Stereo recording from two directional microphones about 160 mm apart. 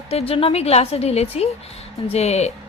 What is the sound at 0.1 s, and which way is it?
A woman's voice, 40° left (ahead or behind).